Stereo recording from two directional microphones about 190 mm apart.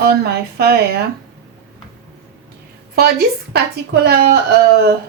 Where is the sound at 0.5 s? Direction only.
55° right (ahead or behind).